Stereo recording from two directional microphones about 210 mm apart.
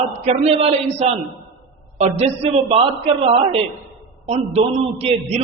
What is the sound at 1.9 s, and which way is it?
A man's voice, 30° right (ahead or behind).